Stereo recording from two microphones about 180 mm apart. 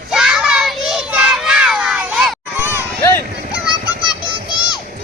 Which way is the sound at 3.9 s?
25° left (ahead or behind).